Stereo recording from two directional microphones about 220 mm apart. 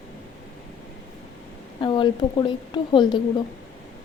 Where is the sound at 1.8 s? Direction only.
20° left (ahead or behind).